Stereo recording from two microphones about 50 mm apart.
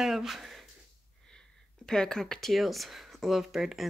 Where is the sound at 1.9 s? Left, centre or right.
Centre.